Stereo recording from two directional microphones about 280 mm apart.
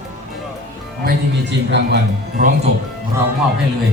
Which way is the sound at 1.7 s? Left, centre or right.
Right.